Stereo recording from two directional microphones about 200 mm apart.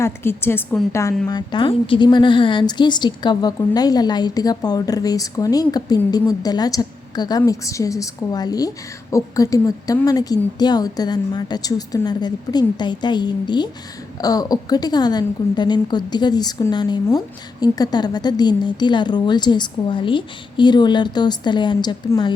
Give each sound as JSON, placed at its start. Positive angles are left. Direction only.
{"t": 0.0, "sound": "a woman's voice", "side_deg": 10}
{"t": 1.3, "sound": "a woman's voice", "side_deg": 20}